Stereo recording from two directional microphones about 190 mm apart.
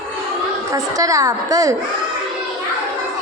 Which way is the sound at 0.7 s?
20° right (ahead or behind).